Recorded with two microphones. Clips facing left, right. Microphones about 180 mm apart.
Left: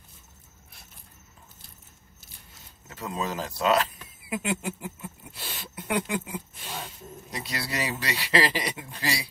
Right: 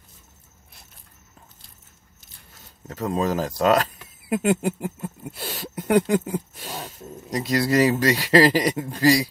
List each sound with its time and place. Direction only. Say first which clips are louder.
2.9 s speech: right 8 dB; 45° right (ahead or behind)